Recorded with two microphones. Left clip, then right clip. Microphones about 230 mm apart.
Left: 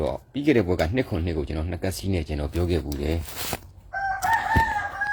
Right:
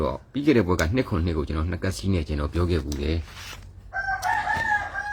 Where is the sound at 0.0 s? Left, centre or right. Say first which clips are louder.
Even; centre.